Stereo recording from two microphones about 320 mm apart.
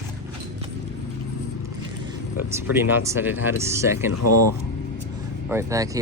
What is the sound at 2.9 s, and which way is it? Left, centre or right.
Speech, centre.